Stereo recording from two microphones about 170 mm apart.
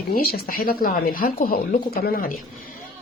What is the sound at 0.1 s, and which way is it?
Speech, 60° left (ahead or behind).